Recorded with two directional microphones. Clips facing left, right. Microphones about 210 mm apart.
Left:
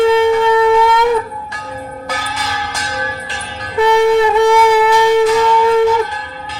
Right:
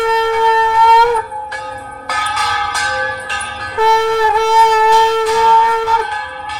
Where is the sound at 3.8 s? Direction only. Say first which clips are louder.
Left 3 dB; 20° left (ahead or behind).